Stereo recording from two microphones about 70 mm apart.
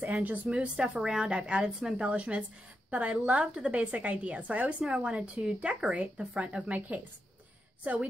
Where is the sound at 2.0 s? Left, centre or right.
Centre.